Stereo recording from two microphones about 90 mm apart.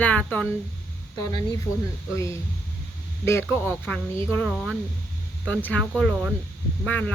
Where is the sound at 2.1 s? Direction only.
35° left (ahead or behind).